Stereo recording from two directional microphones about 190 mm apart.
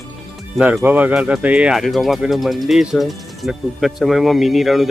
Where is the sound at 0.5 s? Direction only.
5° right (ahead or behind).